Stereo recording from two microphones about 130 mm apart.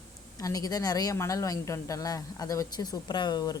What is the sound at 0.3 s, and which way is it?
Speech, 25° left (ahead or behind).